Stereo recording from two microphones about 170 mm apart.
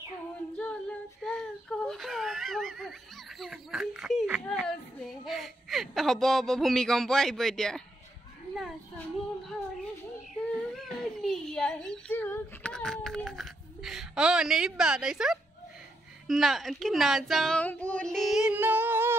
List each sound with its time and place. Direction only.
0.6 s child singing: 5° left (ahead or behind)
5.2 s speech: centre (ahead or behind)
10.7 s speech: centre (ahead or behind)